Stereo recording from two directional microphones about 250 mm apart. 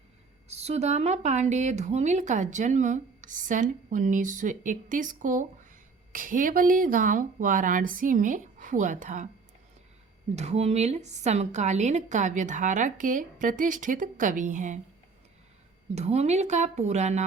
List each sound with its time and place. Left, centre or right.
0.4 s speech: right
10.3 s speech: right
16.0 s speech: right